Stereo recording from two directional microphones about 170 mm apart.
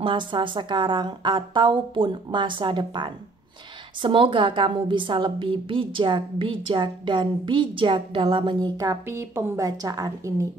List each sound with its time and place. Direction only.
0.0 s a woman's voice: 30° right (ahead or behind)